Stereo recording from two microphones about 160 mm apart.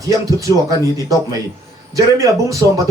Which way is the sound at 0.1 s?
20° right (ahead or behind).